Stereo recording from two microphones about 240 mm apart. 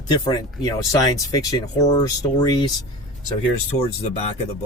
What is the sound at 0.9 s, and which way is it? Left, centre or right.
Speech, centre.